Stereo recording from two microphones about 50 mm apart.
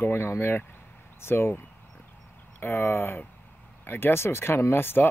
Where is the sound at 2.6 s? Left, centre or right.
Left.